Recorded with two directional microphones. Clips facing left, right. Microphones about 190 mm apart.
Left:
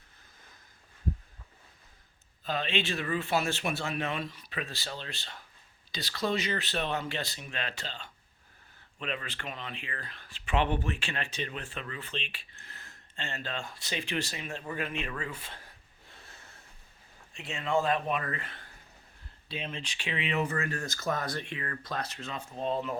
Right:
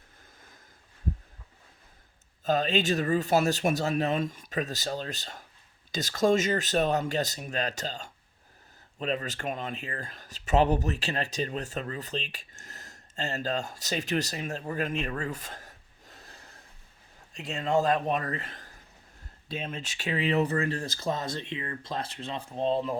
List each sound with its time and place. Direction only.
2.4 s speech: 45° right (ahead or behind)